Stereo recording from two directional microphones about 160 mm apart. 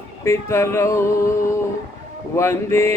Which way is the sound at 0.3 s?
15° left (ahead or behind).